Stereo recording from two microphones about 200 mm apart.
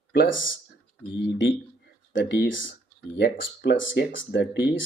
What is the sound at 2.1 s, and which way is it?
Speech, 60° left (ahead or behind).